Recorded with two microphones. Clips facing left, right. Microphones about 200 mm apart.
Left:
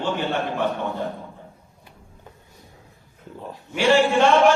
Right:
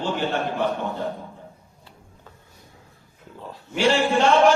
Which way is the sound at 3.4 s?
15° left (ahead or behind).